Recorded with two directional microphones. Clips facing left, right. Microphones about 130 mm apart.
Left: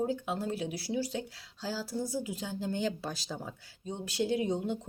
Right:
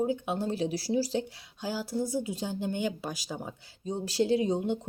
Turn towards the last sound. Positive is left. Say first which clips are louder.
# right 4 dB
turn(degrees=-30)  # may be behind; listen again after turning